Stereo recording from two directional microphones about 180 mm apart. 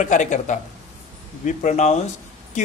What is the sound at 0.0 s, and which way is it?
A man's voice, 45° left (ahead or behind).